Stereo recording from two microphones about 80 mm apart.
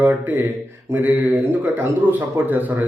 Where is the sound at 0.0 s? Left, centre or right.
Right.